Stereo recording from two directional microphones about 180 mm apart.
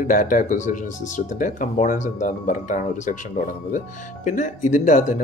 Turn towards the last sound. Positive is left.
turn(degrees=45)  # may be behind; listen again after turning